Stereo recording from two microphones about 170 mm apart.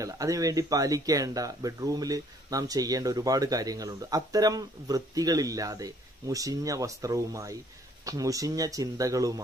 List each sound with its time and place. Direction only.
0.0 s speech: 20° right (ahead or behind)